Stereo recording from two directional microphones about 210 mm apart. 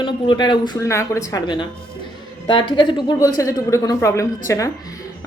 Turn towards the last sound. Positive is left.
turn(degrees=15)  # may be behind; listen again after turning